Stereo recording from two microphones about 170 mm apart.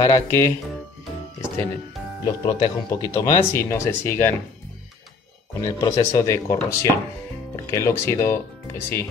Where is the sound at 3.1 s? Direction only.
20° left (ahead or behind).